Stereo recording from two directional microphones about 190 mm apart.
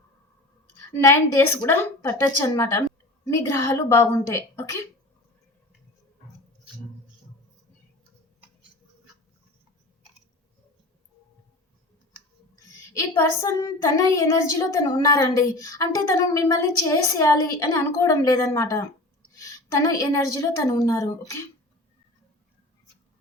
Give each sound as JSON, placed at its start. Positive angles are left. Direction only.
{"t": 0.9, "sound": "a woman's voice", "side_deg": 10}
{"t": 12.9, "sound": "a woman's voice", "side_deg": 15}